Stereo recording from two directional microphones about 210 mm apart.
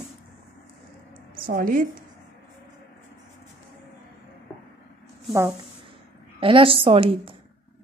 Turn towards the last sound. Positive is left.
turn(degrees=-25)  # may be behind; listen again after turning